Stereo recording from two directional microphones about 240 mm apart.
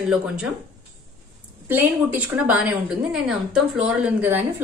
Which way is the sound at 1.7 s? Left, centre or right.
Centre.